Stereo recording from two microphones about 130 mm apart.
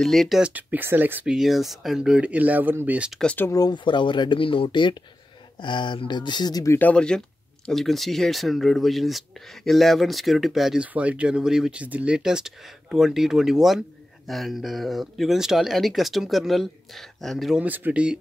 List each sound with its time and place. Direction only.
0.0 s speech: 5° left (ahead or behind)
0.4 s speech: 10° right (ahead or behind)
1.3 s speech: centre (ahead or behind)
3.2 s speech: 10° left (ahead or behind)
3.4 s speech: 30° left (ahead or behind)
6.8 s speech: 10° left (ahead or behind)
17.6 s speech: 15° right (ahead or behind)